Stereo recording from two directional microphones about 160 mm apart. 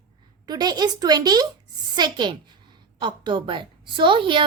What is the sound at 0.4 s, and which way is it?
A woman's voice, 25° right (ahead or behind).